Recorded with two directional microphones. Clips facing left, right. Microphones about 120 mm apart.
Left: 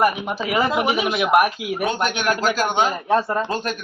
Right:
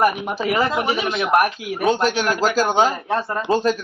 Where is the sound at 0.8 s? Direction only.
15° left (ahead or behind).